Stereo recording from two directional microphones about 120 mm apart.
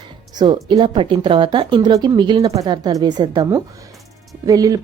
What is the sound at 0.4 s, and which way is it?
A woman's voice, 45° right (ahead or behind).